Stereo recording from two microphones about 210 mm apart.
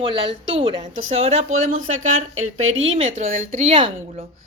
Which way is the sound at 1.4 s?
80° right.